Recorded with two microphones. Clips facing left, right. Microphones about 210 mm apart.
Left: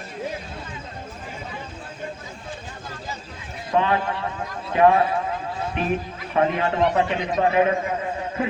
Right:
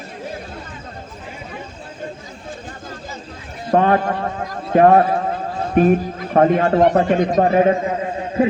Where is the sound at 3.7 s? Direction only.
45° right (ahead or behind).